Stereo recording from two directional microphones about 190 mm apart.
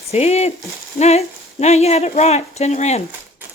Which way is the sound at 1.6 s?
35° left (ahead or behind).